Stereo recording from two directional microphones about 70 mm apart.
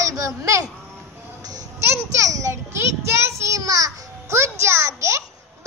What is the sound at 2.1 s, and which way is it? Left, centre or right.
Child singing, right.